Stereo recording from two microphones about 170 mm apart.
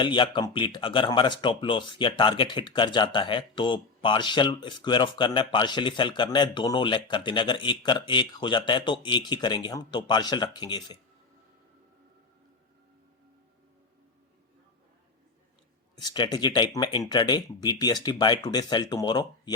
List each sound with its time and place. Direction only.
0.0 s speech: 30° left (ahead or behind)
16.0 s speech: 25° left (ahead or behind)